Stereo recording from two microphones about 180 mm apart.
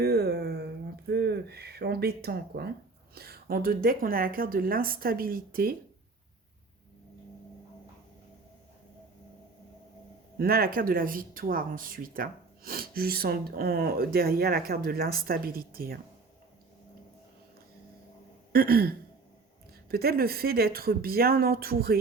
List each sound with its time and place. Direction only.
0.0 s a sound: 65° right (ahead or behind)
3.2 s a woman's voice: 60° right (ahead or behind)
10.3 s speech: 55° right (ahead or behind)
18.5 s speech: 60° right (ahead or behind)